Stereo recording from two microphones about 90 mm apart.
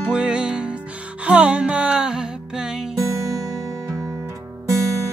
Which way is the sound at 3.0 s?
35° right (ahead or behind).